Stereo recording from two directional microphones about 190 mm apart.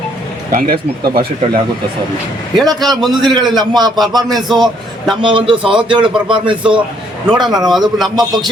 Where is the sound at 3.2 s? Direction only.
20° right (ahead or behind).